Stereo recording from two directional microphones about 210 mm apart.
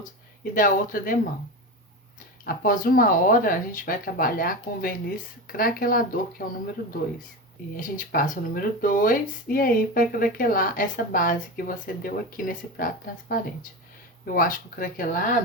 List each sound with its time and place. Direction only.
0.5 s speech: 40° left (ahead or behind)
2.4 s speech: 40° left (ahead or behind)
7.8 s speech: 40° left (ahead or behind)